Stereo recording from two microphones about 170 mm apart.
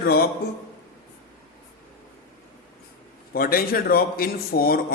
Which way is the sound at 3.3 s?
60° left (ahead or behind).